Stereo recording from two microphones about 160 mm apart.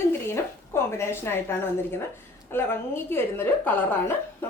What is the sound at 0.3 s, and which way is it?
A woman's voice, 15° left (ahead or behind).